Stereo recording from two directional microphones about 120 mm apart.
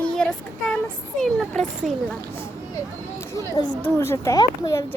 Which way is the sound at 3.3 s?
30° left (ahead or behind).